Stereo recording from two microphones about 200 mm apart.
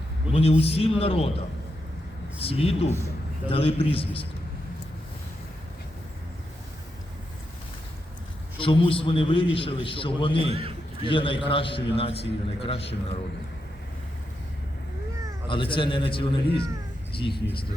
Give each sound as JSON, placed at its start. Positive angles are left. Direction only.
{"t": 0.3, "sound": "a sound", "side_deg": -5}
{"t": 0.6, "sound": "a man's voice", "side_deg": 30}
{"t": 2.4, "sound": "a man's voice", "side_deg": 30}
{"t": 8.5, "sound": "a man's voice", "side_deg": 25}
{"t": 10.5, "sound": "a sound", "side_deg": -25}
{"t": 11.1, "sound": "a man's voice", "side_deg": 25}
{"t": 15.4, "sound": "a man's voice", "side_deg": 25}